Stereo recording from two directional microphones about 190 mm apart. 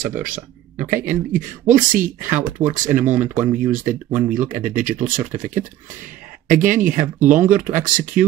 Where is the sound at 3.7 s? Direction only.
45° right (ahead or behind).